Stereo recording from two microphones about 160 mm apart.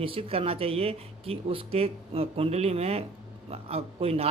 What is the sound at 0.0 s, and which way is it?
Speech, 35° right (ahead or behind).